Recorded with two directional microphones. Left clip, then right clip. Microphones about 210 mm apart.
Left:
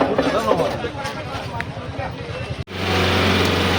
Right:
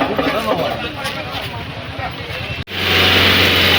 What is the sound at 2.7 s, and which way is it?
Vehicle, 45° left (ahead or behind).